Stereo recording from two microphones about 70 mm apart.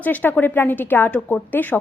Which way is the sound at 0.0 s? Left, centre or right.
Left.